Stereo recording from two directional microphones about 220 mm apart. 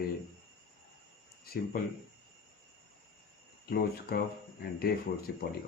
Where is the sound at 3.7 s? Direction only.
45° left (ahead or behind).